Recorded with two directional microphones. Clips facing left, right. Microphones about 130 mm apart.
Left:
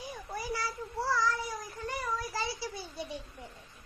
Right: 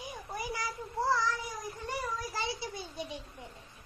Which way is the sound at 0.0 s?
15° right (ahead or behind).